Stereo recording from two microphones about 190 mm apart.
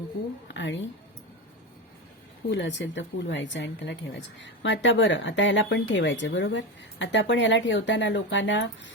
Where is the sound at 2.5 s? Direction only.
70° left (ahead or behind).